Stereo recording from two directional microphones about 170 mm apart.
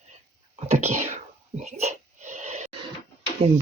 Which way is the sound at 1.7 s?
40° right (ahead or behind).